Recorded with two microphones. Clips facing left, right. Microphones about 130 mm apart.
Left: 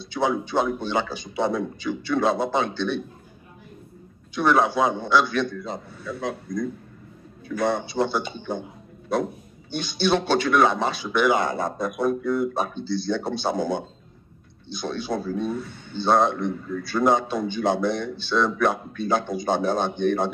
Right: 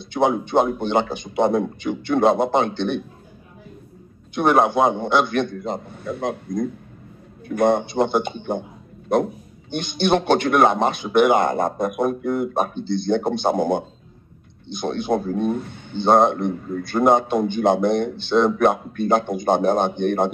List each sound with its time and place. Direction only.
0.0 s speech: 55° right (ahead or behind)
4.4 s speech: 55° right (ahead or behind)